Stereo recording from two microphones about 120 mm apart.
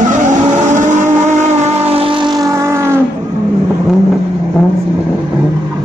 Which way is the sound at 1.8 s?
50° right (ahead or behind).